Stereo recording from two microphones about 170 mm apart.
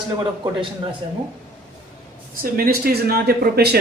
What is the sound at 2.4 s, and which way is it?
Speech, 60° right (ahead or behind).